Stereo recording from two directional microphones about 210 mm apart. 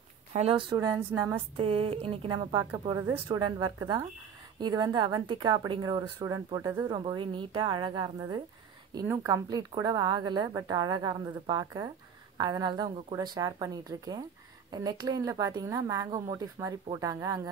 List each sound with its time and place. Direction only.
0.3 s a woman's voice: 25° right (ahead or behind)
1.6 s a woman's voice: 25° right (ahead or behind)